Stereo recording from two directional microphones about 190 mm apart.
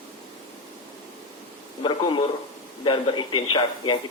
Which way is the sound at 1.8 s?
25° left (ahead or behind).